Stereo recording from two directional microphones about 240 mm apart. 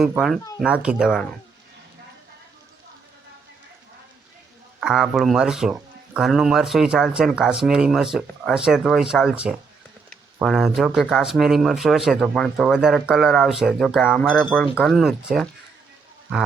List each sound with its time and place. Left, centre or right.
0.0 s speech: centre
4.8 s speech: centre